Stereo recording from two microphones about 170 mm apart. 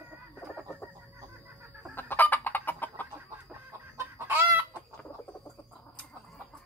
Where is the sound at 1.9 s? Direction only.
10° left (ahead or behind).